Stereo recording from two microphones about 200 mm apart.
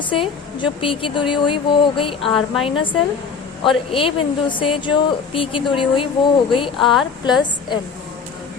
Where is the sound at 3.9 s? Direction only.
25° left (ahead or behind).